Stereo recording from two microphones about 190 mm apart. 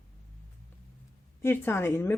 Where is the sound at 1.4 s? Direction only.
10° left (ahead or behind).